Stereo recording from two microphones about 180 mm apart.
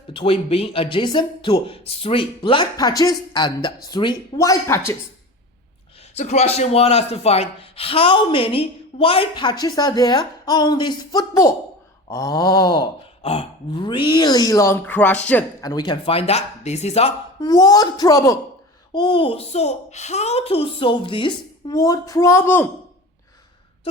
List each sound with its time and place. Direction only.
0.1 s speech: 30° left (ahead or behind); by 4.9 s 15° left (ahead or behind)
6.1 s speech: 35° left (ahead or behind); by 15.2 s 10° left (ahead or behind)
15.6 s speech: 20° left (ahead or behind)
17.4 s speech: 20° left (ahead or behind)